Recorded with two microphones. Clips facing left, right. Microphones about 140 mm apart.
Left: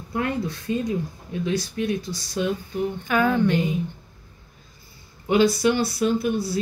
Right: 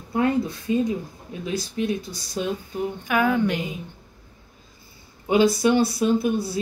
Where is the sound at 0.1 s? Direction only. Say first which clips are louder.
Right 4 dB; 25° right (ahead or behind).